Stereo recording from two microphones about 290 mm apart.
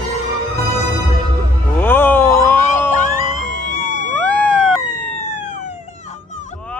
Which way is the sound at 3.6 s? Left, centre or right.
Right.